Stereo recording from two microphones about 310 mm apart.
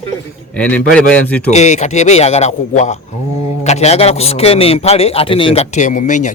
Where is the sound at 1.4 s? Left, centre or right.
Left.